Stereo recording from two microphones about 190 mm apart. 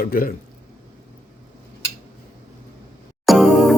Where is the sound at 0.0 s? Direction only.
50° left (ahead or behind).